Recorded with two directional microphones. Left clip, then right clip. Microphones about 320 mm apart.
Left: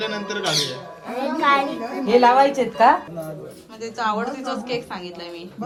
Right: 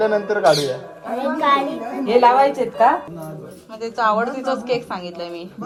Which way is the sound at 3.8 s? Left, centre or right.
Centre.